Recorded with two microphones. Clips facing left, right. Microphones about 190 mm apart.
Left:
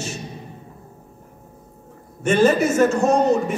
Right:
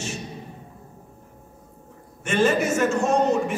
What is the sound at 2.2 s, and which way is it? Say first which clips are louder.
A man's voice: left 5 dB; 40° left (ahead or behind).